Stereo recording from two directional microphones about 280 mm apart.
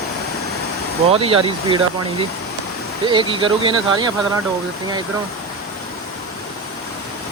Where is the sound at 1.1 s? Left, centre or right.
Centre.